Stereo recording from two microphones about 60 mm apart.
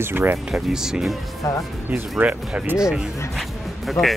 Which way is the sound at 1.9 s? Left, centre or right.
Right.